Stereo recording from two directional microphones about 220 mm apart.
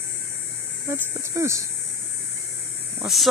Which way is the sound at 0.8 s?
10° right (ahead or behind).